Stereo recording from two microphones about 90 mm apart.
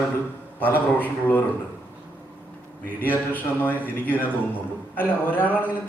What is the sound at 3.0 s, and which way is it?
A man's voice, 20° left (ahead or behind).